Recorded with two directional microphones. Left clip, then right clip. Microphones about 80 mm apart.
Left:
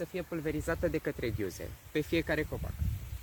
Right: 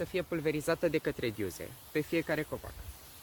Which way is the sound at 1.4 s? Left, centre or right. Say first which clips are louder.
Even; left.